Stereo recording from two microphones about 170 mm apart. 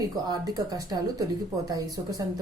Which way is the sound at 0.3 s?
20° right (ahead or behind).